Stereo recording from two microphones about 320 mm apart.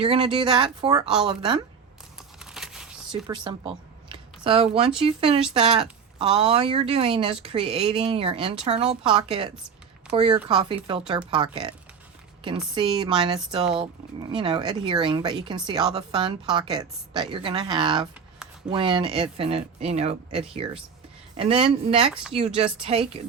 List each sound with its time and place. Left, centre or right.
0.0 s speech: centre
2.4 s a sound: centre
3.1 s speech: centre
12.7 s a woman's voice: centre